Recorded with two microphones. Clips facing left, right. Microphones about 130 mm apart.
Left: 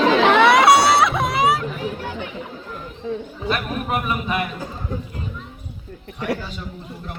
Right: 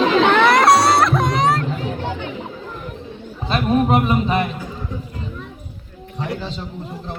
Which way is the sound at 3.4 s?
30° right (ahead or behind).